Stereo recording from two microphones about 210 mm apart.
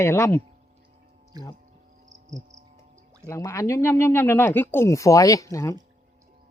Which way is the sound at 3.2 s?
15° left (ahead or behind).